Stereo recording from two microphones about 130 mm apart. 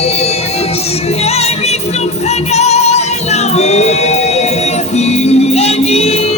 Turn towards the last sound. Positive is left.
turn(degrees=50)  # may be behind; listen again after turning